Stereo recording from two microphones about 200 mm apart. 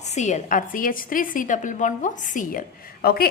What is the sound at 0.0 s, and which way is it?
A woman's voice, 35° left (ahead or behind).